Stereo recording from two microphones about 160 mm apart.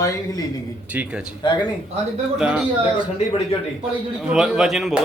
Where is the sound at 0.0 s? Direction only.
20° left (ahead or behind).